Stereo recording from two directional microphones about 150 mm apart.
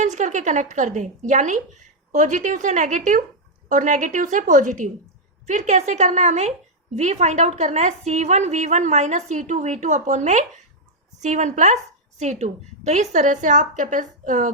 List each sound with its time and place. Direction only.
0.0 s a woman's voice: 50° right (ahead or behind)